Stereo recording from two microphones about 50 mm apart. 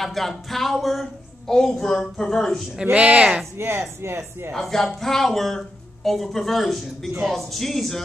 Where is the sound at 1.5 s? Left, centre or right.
Centre.